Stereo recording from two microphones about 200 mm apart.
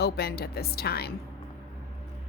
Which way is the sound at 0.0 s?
50° left (ahead or behind).